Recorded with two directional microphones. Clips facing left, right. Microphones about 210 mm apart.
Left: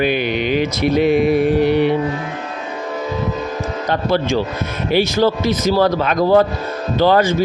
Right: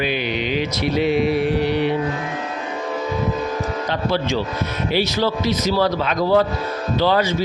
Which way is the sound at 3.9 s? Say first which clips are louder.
Left 5 dB; 50° left (ahead or behind).